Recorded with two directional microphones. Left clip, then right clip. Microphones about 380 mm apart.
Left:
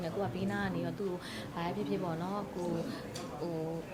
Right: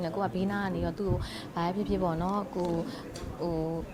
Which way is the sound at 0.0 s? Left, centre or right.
Right.